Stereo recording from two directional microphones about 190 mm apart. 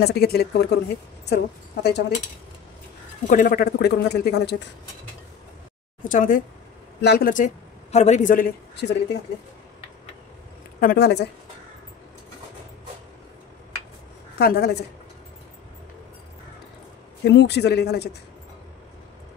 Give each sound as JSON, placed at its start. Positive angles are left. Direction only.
{"t": 0.0, "sound": "speech", "side_deg": 60}
{"t": 3.3, "sound": "speech", "side_deg": 45}
{"t": 6.0, "sound": "speech", "side_deg": 45}
{"t": 7.0, "sound": "a woman's voice", "side_deg": 55}
{"t": 8.7, "sound": "speech", "side_deg": 65}
{"t": 10.8, "sound": "speech", "side_deg": 55}
{"t": 14.4, "sound": "speech", "side_deg": 55}
{"t": 17.2, "sound": "speech", "side_deg": 60}